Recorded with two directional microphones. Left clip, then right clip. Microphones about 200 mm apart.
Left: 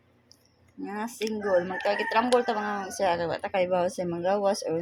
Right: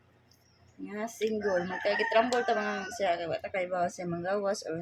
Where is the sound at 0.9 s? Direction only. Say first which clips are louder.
Even; 25° left (ahead or behind).